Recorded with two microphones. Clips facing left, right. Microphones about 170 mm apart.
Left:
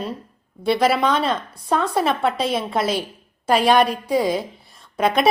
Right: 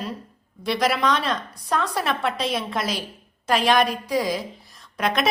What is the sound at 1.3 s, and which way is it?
A woman's voice, 25° left (ahead or behind).